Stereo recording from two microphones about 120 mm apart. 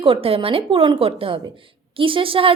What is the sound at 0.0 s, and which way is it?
A woman's voice, 50° right (ahead or behind).